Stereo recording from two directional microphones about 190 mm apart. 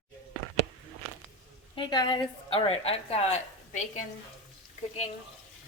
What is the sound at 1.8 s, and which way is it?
A woman's voice, 20° left (ahead or behind).